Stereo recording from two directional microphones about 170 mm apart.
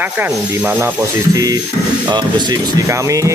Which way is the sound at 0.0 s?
10° right (ahead or behind).